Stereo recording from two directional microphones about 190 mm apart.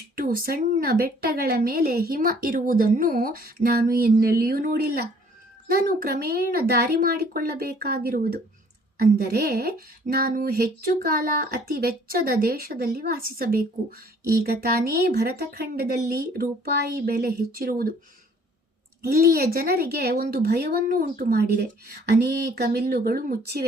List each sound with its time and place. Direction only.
0.2 s speech: 50° right (ahead or behind)
19.0 s speech: 50° right (ahead or behind)
22.7 s speech: 55° right (ahead or behind)